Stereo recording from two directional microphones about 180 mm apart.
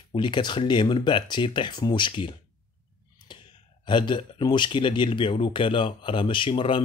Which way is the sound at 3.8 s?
25° left (ahead or behind).